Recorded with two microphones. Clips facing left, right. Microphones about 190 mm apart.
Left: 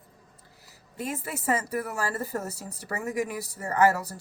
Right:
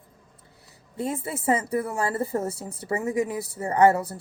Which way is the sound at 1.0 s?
30° right (ahead or behind).